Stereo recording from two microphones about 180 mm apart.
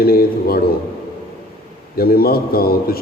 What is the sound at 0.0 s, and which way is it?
Speech, 55° left (ahead or behind).